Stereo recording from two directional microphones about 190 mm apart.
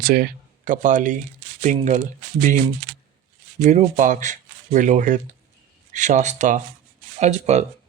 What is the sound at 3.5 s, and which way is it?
Speech, 40° right (ahead or behind).